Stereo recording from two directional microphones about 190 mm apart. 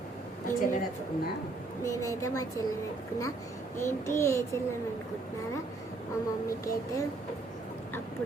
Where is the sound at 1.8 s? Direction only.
15° left (ahead or behind).